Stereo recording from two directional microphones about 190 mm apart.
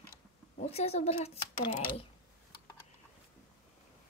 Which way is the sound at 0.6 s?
30° left (ahead or behind).